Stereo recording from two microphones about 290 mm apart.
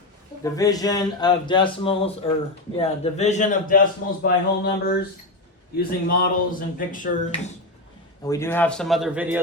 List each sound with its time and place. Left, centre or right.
0.4 s speech: centre
4.2 s a sound: left
5.7 s speech: left
8.2 s a man's voice: centre